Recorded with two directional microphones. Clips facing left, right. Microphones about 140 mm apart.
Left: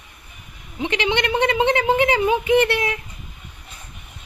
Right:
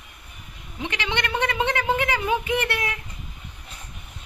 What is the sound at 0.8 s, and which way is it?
A woman's voice, 20° left (ahead or behind).